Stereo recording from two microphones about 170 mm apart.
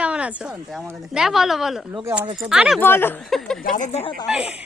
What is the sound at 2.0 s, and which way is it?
Speech, 10° right (ahead or behind).